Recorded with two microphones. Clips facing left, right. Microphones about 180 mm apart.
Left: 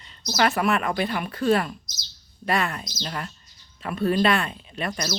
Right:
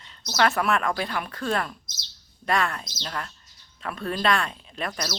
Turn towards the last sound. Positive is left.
turn(degrees=0)  # may be behind; listen again after turning